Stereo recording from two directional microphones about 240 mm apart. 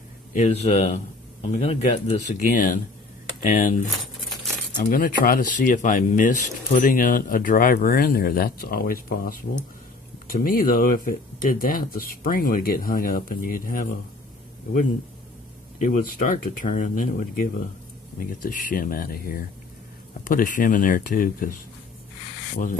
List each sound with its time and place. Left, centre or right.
0.3 s speech: left
4.8 s speech: left
15.8 s speech: left
22.5 s speech: left